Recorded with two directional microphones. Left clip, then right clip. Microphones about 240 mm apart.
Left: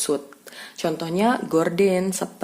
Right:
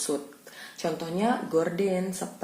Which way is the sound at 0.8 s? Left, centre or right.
Left.